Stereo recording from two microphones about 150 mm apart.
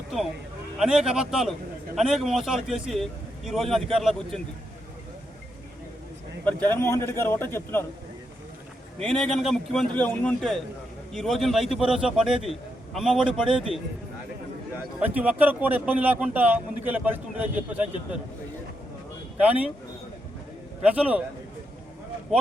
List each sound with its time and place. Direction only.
0.8 s a man's voice: 5° right (ahead or behind)
6.4 s a man's voice: 10° left (ahead or behind)
9.0 s a man's voice: 5° left (ahead or behind)
15.0 s a man's voice: 10° right (ahead or behind)
19.4 s a man's voice: 10° right (ahead or behind)
20.8 s a man's voice: 10° right (ahead or behind)